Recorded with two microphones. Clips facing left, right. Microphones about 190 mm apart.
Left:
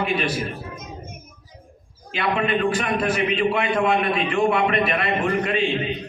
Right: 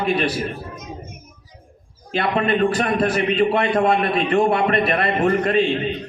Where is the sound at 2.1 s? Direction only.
40° right (ahead or behind).